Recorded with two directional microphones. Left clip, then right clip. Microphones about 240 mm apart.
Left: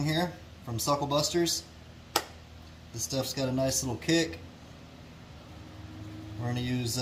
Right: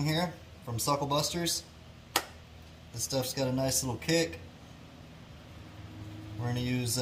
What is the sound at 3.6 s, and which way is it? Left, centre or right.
Speech, right.